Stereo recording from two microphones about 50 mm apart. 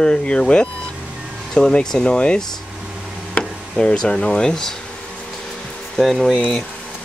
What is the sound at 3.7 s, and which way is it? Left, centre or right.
Speech, centre.